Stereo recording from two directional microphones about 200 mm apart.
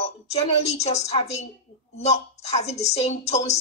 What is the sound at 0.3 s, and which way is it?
A child's voice, 30° left (ahead or behind).